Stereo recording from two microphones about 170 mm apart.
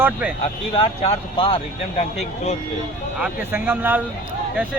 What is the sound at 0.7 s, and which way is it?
Speech, 35° left (ahead or behind).